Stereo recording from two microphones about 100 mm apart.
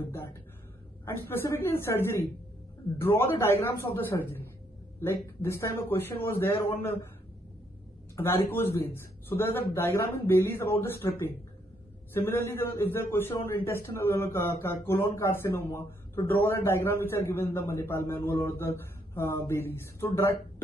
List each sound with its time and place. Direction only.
0.0 s speech: 25° left (ahead or behind)
5.4 s speech: 25° left (ahead or behind)
8.2 s speech: 20° left (ahead or behind)